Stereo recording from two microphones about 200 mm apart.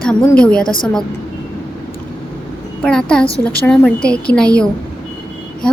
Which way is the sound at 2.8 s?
5° left (ahead or behind).